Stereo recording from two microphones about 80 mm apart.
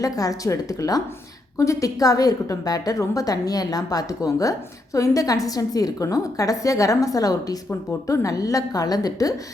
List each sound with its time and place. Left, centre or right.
0.0 s a woman's voice: left